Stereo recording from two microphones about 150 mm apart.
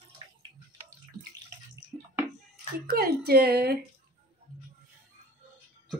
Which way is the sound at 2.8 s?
90° right.